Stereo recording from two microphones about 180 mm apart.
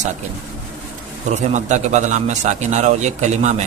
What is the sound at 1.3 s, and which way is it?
A man's voice, 40° right (ahead or behind).